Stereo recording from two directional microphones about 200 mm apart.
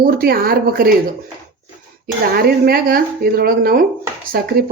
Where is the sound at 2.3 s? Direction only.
50° right (ahead or behind).